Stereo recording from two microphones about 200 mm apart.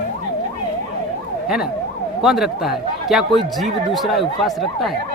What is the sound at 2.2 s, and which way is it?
A man's voice, centre (ahead or behind).